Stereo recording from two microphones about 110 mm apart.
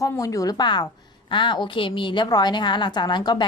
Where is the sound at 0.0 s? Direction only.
30° left (ahead or behind).